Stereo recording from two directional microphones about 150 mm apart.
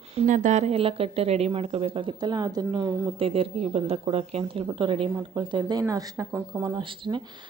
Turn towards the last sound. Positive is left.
turn(degrees=-30)  # may be behind; listen again after turning